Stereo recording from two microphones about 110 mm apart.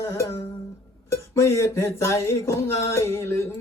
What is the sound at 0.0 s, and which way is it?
Speech, 25° left (ahead or behind).